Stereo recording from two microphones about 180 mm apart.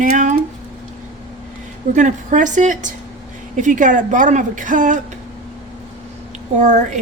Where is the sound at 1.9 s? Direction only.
45° right (ahead or behind).